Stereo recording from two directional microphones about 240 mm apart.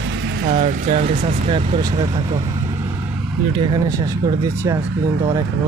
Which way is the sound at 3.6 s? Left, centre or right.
Centre.